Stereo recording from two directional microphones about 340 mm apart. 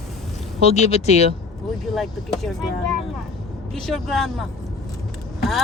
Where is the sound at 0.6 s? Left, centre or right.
Centre.